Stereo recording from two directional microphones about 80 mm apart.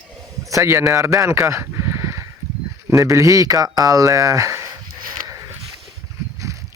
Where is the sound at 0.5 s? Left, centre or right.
Right.